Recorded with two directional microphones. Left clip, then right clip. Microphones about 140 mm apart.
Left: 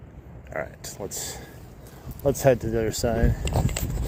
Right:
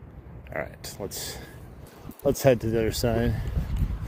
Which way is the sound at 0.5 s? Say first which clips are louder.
Left 1 dB; 55° right (ahead or behind).